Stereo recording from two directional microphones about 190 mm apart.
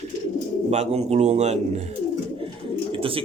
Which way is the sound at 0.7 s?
35° right (ahead or behind).